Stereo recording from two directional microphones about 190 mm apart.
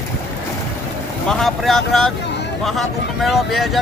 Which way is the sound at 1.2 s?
Centre (ahead or behind).